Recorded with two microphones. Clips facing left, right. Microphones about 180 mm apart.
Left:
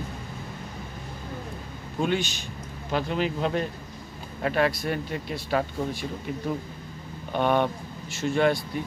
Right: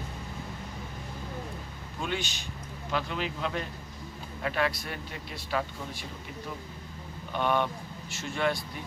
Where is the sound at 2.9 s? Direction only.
45° left (ahead or behind).